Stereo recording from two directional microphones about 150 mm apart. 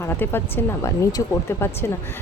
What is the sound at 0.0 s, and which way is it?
Speech, 15° left (ahead or behind).